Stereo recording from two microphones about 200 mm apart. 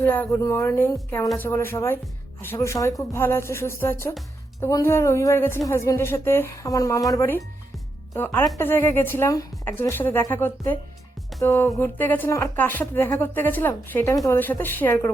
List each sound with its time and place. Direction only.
0.0 s a woman's voice: 10° left (ahead or behind)